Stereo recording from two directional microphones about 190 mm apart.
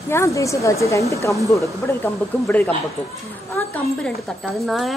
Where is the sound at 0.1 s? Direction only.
15° left (ahead or behind).